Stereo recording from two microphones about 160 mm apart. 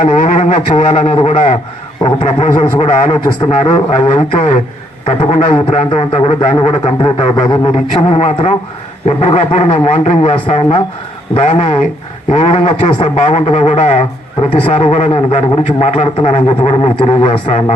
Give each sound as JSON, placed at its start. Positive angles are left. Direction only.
{"t": 0.0, "sound": "a sound", "side_deg": 50}
{"t": 2.0, "sound": "a man's voice", "side_deg": 45}
{"t": 7.4, "sound": "a man's voice", "side_deg": 25}
{"t": 8.0, "sound": "a man's voice", "side_deg": 40}
{"t": 13.4, "sound": "a sound", "side_deg": 40}
{"t": 14.5, "sound": "a man's voice", "side_deg": 40}